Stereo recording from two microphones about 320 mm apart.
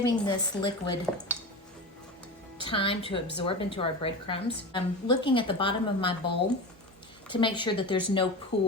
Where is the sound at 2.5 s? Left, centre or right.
Centre.